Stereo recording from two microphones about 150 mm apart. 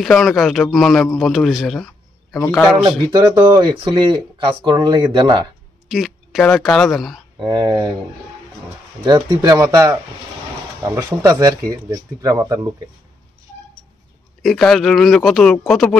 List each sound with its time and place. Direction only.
0.0 s a man's voice: centre (ahead or behind)
3.1 s speech: 25° right (ahead or behind)
5.9 s speech: centre (ahead or behind)
7.4 s speech: 25° right (ahead or behind)
9.0 s speech: 30° right (ahead or behind)
14.4 s a man's voice: centre (ahead or behind)